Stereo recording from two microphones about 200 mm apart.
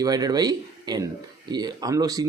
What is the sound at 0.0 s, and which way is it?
Speech, 20° right (ahead or behind).